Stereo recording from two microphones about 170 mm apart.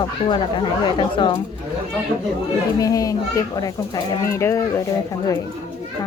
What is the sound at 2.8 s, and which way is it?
A woman's voice, 20° left (ahead or behind).